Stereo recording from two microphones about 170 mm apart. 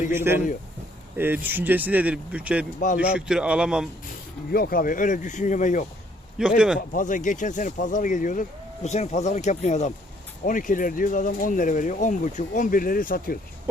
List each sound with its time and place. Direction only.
0.1 s speech: 15° right (ahead or behind)
4.5 s speech: 60° left (ahead or behind)
6.4 s speech: 5° right (ahead or behind)
6.9 s speech: 50° left (ahead or behind)